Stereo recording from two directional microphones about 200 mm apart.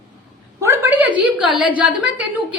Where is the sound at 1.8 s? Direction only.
5° right (ahead or behind).